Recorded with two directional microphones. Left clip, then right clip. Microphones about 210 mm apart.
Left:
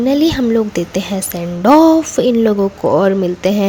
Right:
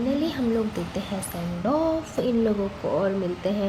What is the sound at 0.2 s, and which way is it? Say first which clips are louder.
A woman's voice: left 12 dB; 50° left (ahead or behind).